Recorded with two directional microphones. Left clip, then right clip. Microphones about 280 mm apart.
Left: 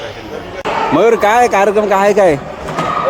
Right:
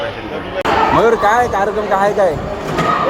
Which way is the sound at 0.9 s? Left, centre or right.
Left.